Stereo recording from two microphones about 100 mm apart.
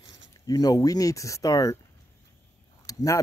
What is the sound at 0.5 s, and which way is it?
Speech, 40° left (ahead or behind).